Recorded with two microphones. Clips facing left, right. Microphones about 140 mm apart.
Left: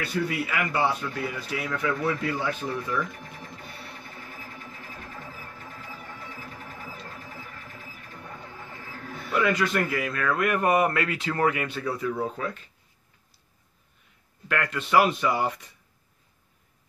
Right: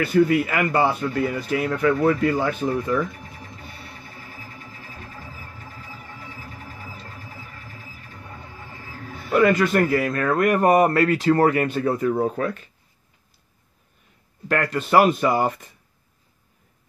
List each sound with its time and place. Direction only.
0.0 s a man's voice: 55° right (ahead or behind)
9.3 s a man's voice: 50° right (ahead or behind)
14.5 s a man's voice: 40° right (ahead or behind)